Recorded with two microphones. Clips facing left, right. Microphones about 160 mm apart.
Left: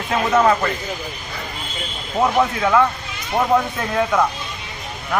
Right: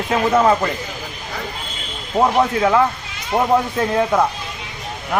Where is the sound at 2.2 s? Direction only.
20° right (ahead or behind).